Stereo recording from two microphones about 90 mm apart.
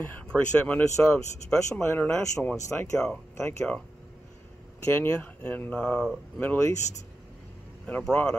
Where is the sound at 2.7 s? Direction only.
15° left (ahead or behind).